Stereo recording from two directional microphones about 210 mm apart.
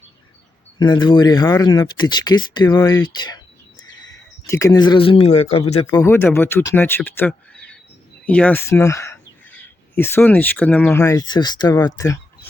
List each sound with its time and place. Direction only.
0.8 s speech: 20° left (ahead or behind)
5.9 s speech: 10° left (ahead or behind)